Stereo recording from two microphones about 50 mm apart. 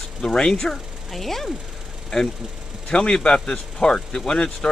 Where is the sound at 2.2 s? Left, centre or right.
Centre.